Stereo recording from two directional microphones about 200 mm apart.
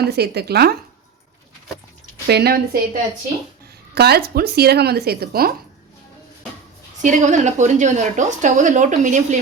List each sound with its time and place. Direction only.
0.0 s speech: 55° right (ahead or behind)
2.2 s speech: 50° right (ahead or behind)
3.9 s speech: 50° right (ahead or behind)
7.0 s speech: 40° right (ahead or behind)